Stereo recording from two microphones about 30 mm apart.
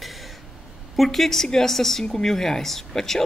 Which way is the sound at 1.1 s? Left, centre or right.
Centre.